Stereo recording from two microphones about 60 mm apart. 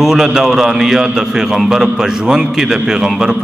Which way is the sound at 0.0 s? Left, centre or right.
Centre.